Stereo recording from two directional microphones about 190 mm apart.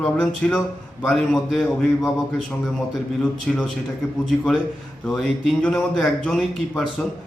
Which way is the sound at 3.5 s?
5° left (ahead or behind).